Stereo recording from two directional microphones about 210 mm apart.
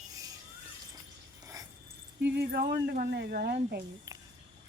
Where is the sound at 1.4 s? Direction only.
15° right (ahead or behind).